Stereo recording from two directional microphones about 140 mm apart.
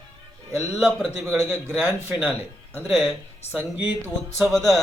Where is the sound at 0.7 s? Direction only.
5° right (ahead or behind).